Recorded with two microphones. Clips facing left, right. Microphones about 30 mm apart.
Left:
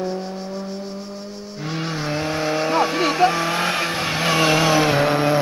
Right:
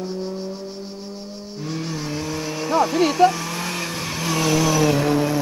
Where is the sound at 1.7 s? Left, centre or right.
Left.